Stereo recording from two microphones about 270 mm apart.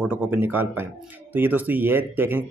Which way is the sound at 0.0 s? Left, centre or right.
Centre.